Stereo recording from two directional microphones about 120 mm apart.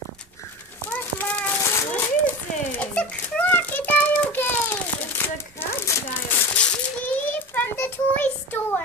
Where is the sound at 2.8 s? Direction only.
15° left (ahead or behind).